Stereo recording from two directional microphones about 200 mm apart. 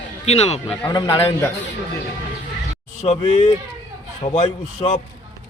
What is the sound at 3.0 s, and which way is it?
A man's voice, 30° left (ahead or behind).